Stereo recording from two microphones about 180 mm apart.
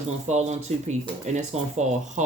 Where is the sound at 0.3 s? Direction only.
40° right (ahead or behind).